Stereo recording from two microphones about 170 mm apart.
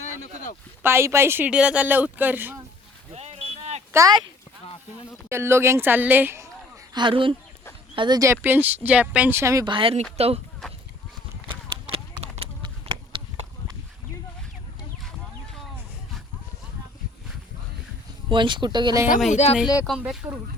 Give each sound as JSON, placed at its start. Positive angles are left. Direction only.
{"t": 0.8, "sound": "speech", "side_deg": -15}
{"t": 3.1, "sound": "a sound", "side_deg": -40}
{"t": 3.9, "sound": "speech", "side_deg": -20}
{"t": 5.3, "sound": "speech", "side_deg": -15}
{"t": 6.9, "sound": "speech", "side_deg": -30}
{"t": 9.7, "sound": "speech", "side_deg": -35}
{"t": 11.4, "sound": "a sound", "side_deg": -35}
{"t": 18.3, "sound": "speech", "side_deg": -25}
{"t": 19.3, "sound": "speech", "side_deg": 40}
{"t": 19.8, "sound": "speech", "side_deg": 0}